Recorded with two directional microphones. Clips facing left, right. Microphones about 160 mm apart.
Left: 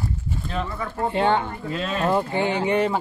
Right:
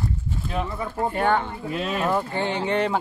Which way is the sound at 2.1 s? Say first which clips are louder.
Left 5 dB; 15° left (ahead or behind).